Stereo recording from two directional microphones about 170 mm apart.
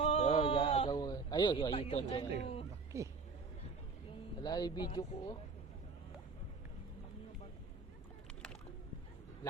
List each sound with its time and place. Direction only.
0.0 s a sound: 35° left (ahead or behind)
0.9 s a man's voice: 25° left (ahead or behind)
2.9 s speech: 15° right (ahead or behind)
4.4 s speech: 25° left (ahead or behind)